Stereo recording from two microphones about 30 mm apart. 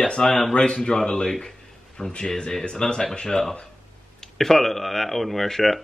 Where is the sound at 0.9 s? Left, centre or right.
Centre.